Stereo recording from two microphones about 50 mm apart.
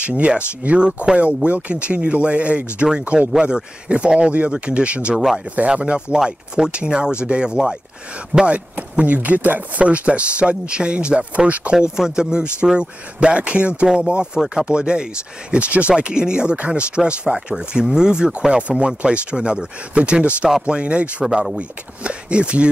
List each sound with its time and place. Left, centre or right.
0.0 s speech: right
5.1 s speech: centre
5.6 s speech: right
12.0 s speech: centre